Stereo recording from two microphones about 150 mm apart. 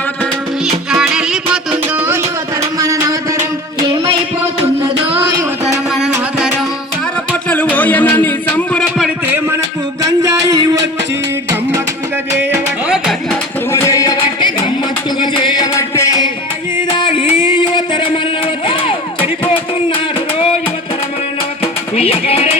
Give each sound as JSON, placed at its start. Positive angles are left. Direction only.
{"t": 0.9, "sound": "music", "side_deg": -5}
{"t": 2.7, "sound": "music", "side_deg": -20}
{"t": 5.9, "sound": "music", "side_deg": -5}
{"t": 7.5, "sound": "music", "side_deg": 10}
{"t": 10.0, "sound": "a sound", "side_deg": -20}
{"t": 13.8, "sound": "music", "side_deg": 20}
{"t": 21.6, "sound": "music", "side_deg": 40}